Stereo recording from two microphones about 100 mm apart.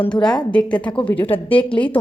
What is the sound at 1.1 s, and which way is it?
Speech, 65° left (ahead or behind).